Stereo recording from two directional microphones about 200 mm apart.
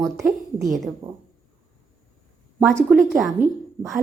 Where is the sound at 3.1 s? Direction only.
10° right (ahead or behind).